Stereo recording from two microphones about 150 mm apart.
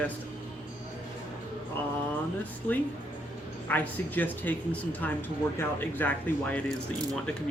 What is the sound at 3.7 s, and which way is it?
Speech, 10° left (ahead or behind).